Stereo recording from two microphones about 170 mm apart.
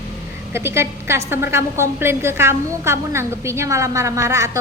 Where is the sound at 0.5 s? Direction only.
15° right (ahead or behind).